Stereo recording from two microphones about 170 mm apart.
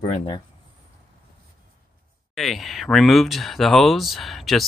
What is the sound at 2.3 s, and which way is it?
Speech, centre (ahead or behind).